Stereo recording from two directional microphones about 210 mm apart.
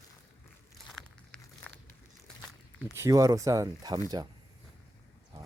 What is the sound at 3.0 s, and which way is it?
Speech, 15° right (ahead or behind).